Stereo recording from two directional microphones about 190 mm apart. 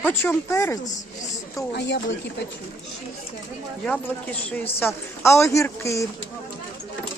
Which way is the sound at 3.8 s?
5° left (ahead or behind).